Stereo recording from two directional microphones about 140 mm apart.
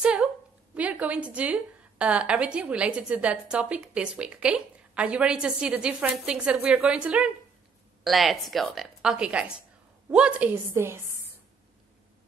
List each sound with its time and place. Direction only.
0.0 s a woman's voice: 5° right (ahead or behind)
10.7 s a woman's voice: 20° right (ahead or behind)